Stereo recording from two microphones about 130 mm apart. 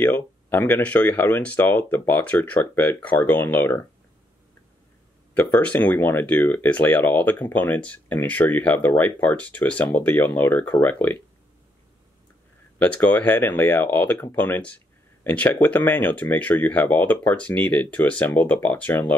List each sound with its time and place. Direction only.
0.0 s speech: 15° left (ahead or behind)
5.3 s speech: 15° left (ahead or behind)
12.7 s speech: 10° left (ahead or behind)